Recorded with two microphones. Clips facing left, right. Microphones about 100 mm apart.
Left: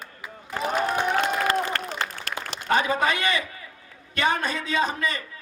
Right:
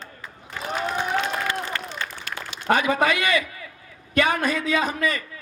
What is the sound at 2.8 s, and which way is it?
A man's voice, 30° left (ahead or behind).